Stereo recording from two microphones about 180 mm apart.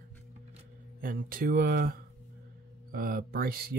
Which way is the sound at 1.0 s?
50° right (ahead or behind).